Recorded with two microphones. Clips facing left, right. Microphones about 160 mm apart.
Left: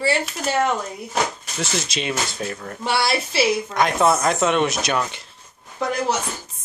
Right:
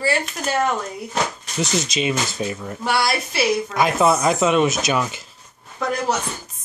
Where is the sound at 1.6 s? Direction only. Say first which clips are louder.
Right 4 dB; centre (ahead or behind).